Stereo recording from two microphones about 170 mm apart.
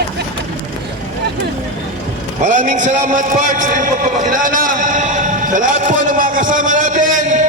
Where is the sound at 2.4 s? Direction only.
50° right (ahead or behind).